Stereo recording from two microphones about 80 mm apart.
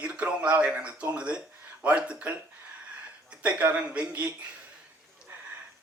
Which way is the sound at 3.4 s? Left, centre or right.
Centre.